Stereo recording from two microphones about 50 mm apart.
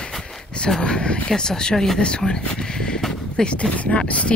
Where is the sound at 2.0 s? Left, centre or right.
Centre.